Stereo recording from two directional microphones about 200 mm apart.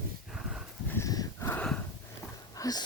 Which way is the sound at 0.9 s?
15° left (ahead or behind).